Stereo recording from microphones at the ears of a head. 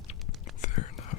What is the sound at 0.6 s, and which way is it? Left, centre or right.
Whispering, left.